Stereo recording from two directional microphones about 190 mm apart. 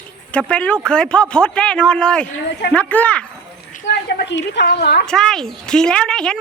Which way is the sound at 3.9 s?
65° left (ahead or behind).